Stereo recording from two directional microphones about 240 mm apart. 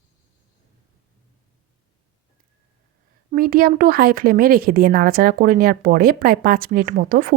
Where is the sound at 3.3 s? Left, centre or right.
Right.